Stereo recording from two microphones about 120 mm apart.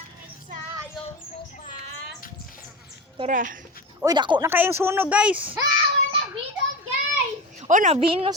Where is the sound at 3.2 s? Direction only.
90° right.